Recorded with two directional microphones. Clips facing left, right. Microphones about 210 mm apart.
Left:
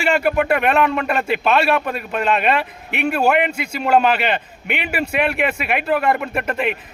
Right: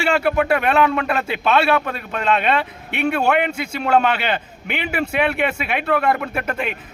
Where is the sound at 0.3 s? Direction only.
5° left (ahead or behind).